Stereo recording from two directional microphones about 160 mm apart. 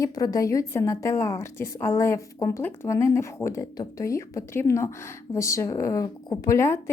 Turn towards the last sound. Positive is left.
turn(degrees=15)  # may be behind; listen again after turning